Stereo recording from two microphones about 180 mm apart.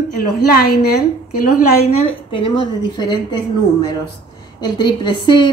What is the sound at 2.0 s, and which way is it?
A woman's voice, 30° left (ahead or behind).